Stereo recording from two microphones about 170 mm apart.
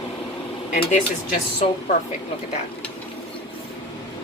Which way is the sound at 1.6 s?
40° left (ahead or behind).